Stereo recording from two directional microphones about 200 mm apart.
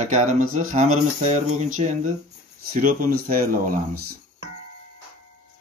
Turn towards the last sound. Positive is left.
turn(degrees=-45)  # may be behind; listen again after turning